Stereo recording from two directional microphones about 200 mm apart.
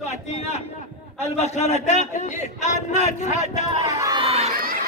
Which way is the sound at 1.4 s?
35° left (ahead or behind).